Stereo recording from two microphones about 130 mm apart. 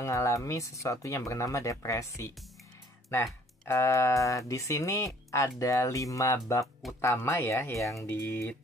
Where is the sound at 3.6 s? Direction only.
20° left (ahead or behind).